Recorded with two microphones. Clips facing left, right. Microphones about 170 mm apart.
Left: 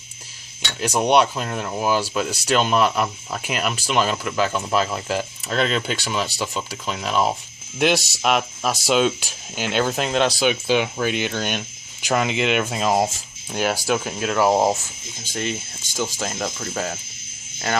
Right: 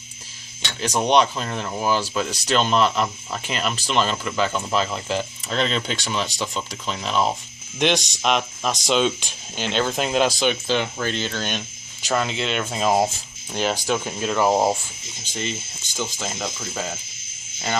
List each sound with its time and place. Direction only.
0.8 s speech: 10° left (ahead or behind)
12.8 s speech: centre (ahead or behind)